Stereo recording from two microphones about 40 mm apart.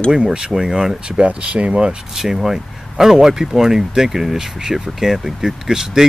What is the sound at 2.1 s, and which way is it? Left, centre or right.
Speech, centre.